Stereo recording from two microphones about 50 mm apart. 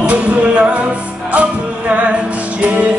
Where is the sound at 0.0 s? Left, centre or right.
Right.